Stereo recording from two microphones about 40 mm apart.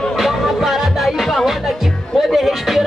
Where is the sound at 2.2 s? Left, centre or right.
Centre.